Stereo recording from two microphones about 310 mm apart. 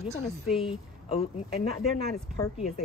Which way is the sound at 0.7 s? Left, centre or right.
Centre.